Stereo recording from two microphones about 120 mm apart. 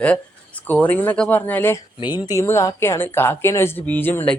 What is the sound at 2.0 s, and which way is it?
Speech, 35° left (ahead or behind).